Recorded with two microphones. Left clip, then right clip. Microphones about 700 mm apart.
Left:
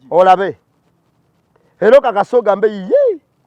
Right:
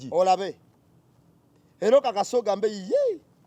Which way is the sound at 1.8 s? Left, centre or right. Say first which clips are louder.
Left 11 dB; left.